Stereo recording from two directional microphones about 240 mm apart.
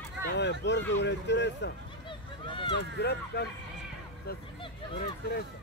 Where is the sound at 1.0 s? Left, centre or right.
Left.